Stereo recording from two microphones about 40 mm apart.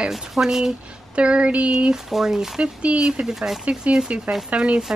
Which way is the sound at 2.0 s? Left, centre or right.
Centre.